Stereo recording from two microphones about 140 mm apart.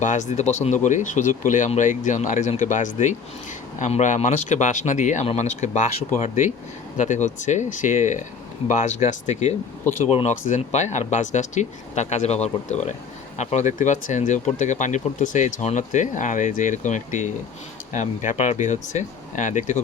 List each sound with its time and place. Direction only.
0.0 s speech: 60° left (ahead or behind)